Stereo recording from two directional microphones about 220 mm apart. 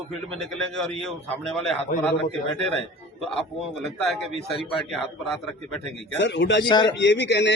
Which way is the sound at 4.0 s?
Centre (ahead or behind).